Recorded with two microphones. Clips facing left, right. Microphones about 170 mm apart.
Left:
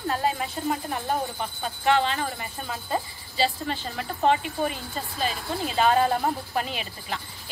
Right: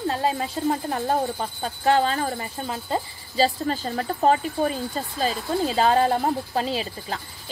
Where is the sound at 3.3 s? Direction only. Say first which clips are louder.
Right 4 dB; 40° right (ahead or behind).